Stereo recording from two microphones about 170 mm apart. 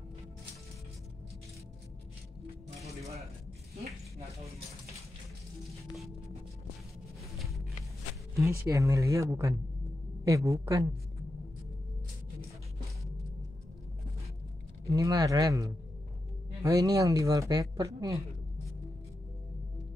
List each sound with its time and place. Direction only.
8.4 s speech: 20° right (ahead or behind)
14.9 s speech: 20° right (ahead or behind)